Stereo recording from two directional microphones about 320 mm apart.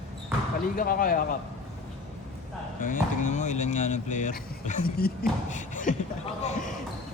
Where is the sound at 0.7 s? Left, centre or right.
Left.